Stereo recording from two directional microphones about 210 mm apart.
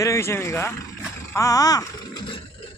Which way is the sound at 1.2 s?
15° left (ahead or behind).